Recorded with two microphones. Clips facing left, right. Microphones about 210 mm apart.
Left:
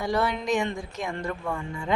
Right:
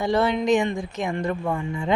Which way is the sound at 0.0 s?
25° right (ahead or behind).